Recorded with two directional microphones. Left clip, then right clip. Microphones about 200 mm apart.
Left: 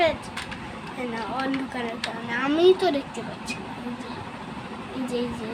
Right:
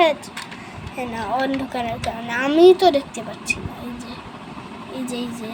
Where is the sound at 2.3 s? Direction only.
30° right (ahead or behind).